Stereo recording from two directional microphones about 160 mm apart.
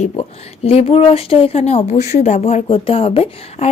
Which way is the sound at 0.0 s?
40° left (ahead or behind).